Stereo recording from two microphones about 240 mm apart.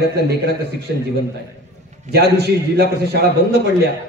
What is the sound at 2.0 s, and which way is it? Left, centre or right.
A man's voice, right.